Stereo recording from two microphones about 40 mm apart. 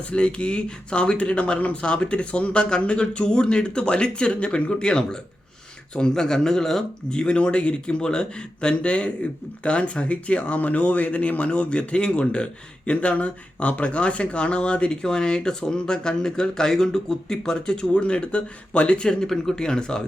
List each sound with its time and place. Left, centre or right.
0.1 s speech: left
7.1 s speech: left
17.9 s speech: left
19.0 s speech: centre